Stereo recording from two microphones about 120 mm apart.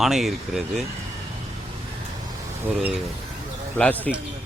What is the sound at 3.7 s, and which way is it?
Speech, 10° left (ahead or behind).